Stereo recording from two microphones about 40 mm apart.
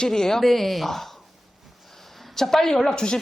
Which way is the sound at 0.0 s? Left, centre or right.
Centre.